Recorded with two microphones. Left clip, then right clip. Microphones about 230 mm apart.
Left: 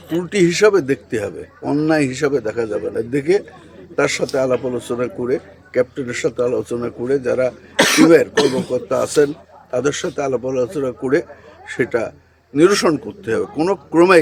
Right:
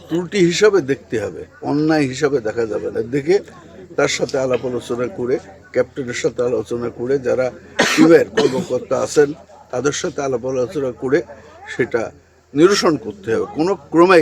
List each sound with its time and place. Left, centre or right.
0.2 s a man's voice: centre
7.8 s cough: left
8.5 s a man's voice: centre